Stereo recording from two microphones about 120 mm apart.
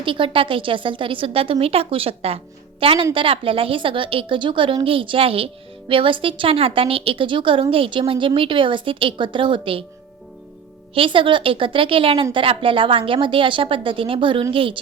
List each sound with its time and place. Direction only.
0.0 s a woman's voice: 45° right (ahead or behind)
10.9 s a woman's voice: 45° right (ahead or behind)